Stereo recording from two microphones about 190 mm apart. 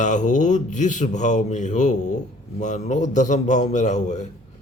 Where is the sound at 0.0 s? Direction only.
40° left (ahead or behind).